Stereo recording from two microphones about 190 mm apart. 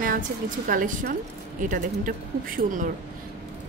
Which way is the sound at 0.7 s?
45° right (ahead or behind).